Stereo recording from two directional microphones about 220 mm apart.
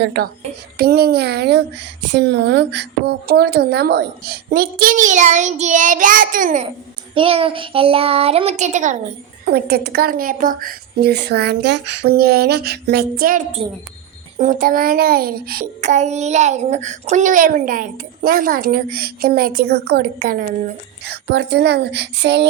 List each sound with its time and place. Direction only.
0.0 s speech: 50° right (ahead or behind); by 6.7 s 35° right (ahead or behind)
7.1 s a child's voice: 25° right (ahead or behind)
9.5 s speech: 45° right (ahead or behind)
13.6 s a child's voice: 25° right (ahead or behind)
14.3 s a child's voice: 35° right (ahead or behind)